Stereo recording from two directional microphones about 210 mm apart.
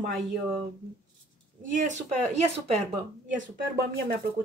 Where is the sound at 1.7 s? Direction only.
35° right (ahead or behind).